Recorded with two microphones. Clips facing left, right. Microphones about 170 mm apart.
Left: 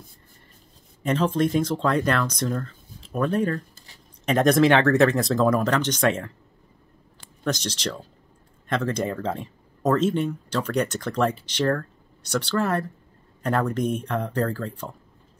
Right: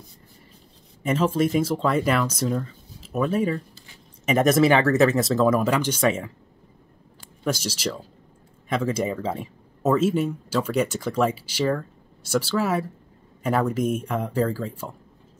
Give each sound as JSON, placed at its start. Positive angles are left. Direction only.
{"t": 1.0, "sound": "speech", "side_deg": -5}
{"t": 3.7, "sound": "a sound", "side_deg": 40}
{"t": 4.3, "sound": "speech", "side_deg": -5}
{"t": 7.4, "sound": "speech", "side_deg": -10}